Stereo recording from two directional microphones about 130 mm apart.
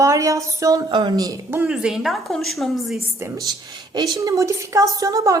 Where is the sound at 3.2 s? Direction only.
25° right (ahead or behind).